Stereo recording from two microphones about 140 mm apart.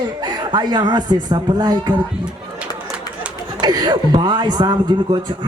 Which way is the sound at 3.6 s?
30° right (ahead or behind).